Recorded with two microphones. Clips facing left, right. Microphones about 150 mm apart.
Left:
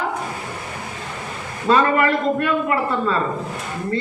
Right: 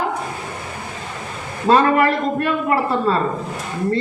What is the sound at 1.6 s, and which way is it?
Speech, 40° right (ahead or behind).